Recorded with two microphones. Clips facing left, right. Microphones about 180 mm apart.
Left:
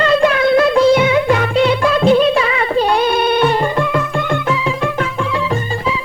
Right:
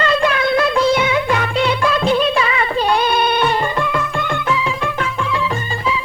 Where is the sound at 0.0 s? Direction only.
40° left (ahead or behind).